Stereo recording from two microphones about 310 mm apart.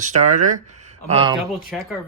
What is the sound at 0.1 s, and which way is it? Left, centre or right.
Speech, right.